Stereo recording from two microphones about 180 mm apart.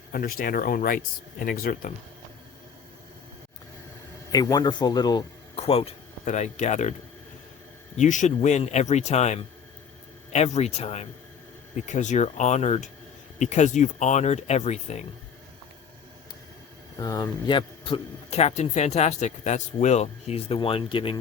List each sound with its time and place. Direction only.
0.1 s speech: 55° left (ahead or behind)
4.3 s speech: 20° left (ahead or behind)
5.5 s speech: 35° left (ahead or behind)
7.9 s a man's voice: 45° left (ahead or behind)
17.0 s a man's voice: 20° left (ahead or behind)